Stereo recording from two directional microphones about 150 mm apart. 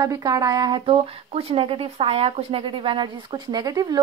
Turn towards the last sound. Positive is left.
turn(degrees=-25)  # may be behind; listen again after turning